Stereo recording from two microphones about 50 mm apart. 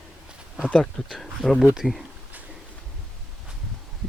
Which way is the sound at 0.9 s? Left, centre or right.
Centre.